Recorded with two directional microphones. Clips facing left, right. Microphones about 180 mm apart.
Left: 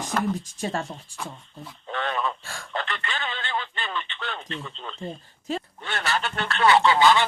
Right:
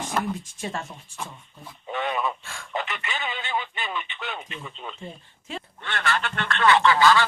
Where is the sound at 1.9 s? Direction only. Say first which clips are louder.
Right 1 dB; 10° right (ahead or behind).